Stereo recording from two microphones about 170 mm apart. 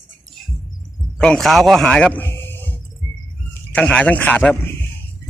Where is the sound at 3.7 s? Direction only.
5° left (ahead or behind).